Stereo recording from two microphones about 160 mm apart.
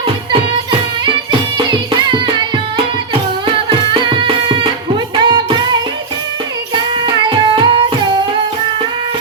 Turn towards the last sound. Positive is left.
turn(degrees=-30)  # may be behind; listen again after turning